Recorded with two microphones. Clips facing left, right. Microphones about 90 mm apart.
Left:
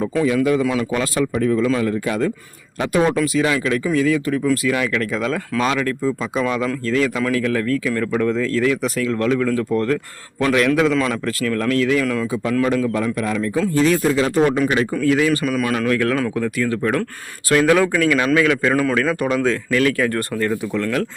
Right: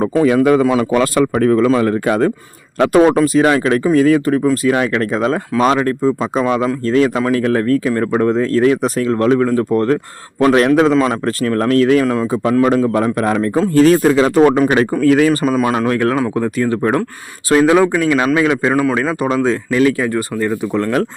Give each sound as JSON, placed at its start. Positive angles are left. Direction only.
{"t": 0.0, "sound": "a man's voice", "side_deg": -50}
{"t": 3.2, "sound": "a man's voice", "side_deg": -40}
{"t": 10.9, "sound": "speech", "side_deg": -25}
{"t": 11.3, "sound": "speech", "side_deg": -40}
{"t": 12.0, "sound": "speech", "side_deg": -30}
{"t": 12.7, "sound": "a man's voice", "side_deg": -45}
{"t": 14.5, "sound": "a man's voice", "side_deg": -50}
{"t": 15.5, "sound": "speech", "side_deg": -25}
{"t": 18.7, "sound": "a man's voice", "side_deg": -10}
{"t": 18.9, "sound": "speech", "side_deg": -20}
{"t": 20.7, "sound": "speech", "side_deg": -35}